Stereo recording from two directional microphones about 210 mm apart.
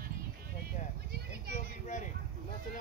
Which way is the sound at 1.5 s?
35° left (ahead or behind).